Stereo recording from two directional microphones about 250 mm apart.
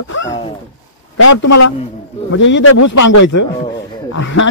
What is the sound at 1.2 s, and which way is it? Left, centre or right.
Speech, left.